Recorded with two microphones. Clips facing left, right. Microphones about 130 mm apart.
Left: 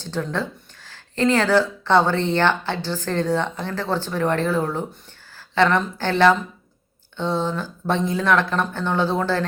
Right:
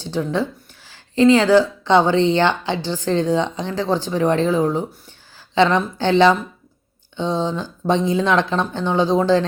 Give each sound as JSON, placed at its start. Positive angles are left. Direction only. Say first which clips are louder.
{"t": 0.0, "sound": "speech", "louder": "right 4 dB", "side_deg": -15}